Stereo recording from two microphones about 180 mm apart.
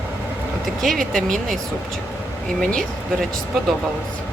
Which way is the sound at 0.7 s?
Centre (ahead or behind).